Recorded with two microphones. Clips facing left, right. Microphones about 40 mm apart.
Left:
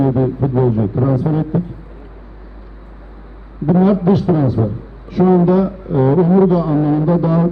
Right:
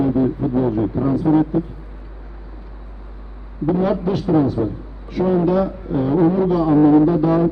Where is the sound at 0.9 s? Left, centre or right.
Centre.